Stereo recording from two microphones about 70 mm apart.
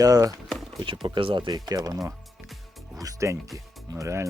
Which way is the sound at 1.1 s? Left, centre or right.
Right.